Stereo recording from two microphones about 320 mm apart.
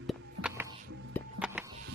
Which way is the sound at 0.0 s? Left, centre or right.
Centre.